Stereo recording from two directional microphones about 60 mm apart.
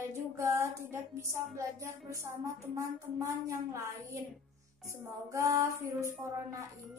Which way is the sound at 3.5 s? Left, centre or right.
Right.